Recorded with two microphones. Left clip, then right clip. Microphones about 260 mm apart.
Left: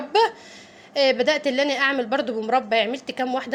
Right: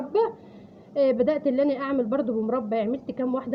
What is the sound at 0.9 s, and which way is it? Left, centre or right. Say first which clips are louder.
A woman's voice: left 3 dB; centre.